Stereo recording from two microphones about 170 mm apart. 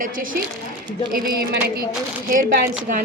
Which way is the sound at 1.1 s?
60° right (ahead or behind).